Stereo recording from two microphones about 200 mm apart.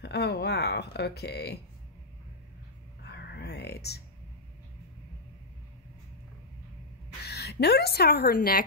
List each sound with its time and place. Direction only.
0.0 s speech: 55° left (ahead or behind)
3.0 s a sound: 55° left (ahead or behind)
7.2 s a woman's voice: 55° left (ahead or behind)